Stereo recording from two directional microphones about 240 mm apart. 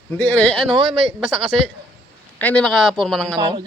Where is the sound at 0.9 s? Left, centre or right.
Centre.